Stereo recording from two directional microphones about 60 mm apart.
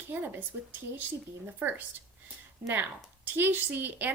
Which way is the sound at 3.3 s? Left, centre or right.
Right.